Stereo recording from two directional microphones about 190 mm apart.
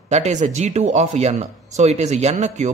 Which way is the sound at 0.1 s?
40° right (ahead or behind).